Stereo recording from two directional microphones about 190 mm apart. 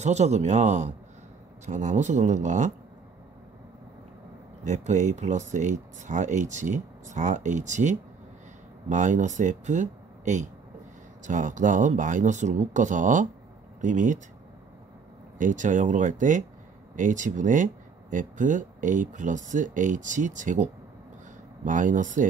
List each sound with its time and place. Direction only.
0.0 s speech: 35° right (ahead or behind)
4.6 s speech: 40° right (ahead or behind)
15.3 s speech: 40° right (ahead or behind)